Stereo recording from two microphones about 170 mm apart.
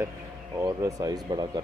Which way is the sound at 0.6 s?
20° right (ahead or behind).